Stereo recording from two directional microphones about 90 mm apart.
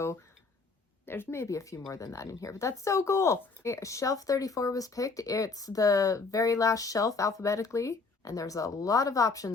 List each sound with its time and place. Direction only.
1.0 s speech: 25° left (ahead or behind)